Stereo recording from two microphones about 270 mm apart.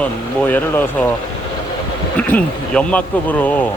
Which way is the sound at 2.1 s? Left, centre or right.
Centre.